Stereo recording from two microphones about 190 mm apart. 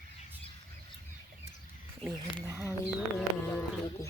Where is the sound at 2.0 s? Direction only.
10° right (ahead or behind).